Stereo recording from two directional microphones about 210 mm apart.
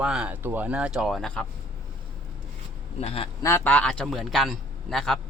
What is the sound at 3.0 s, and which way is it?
Speech, 30° left (ahead or behind).